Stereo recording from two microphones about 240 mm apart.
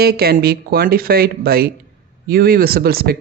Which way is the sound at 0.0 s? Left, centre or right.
Right.